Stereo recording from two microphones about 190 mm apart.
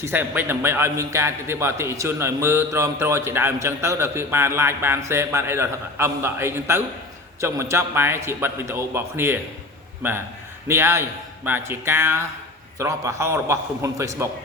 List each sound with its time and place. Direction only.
0.0 s a man's voice: 10° right (ahead or behind)